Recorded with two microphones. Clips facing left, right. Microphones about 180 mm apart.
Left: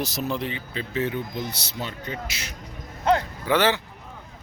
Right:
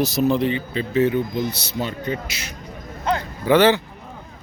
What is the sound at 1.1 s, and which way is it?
Speech, 55° right (ahead or behind).